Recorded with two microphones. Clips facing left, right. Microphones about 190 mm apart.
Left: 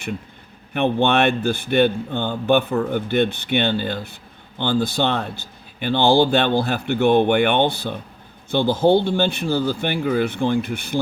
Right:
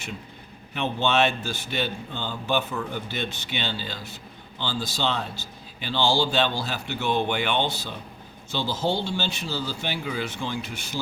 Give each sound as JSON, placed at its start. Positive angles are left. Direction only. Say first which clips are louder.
{"t": 0.7, "sound": "speech", "louder": "left 7 dB", "side_deg": 60}